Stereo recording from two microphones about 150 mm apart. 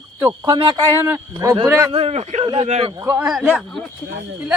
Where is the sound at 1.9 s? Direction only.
40° right (ahead or behind).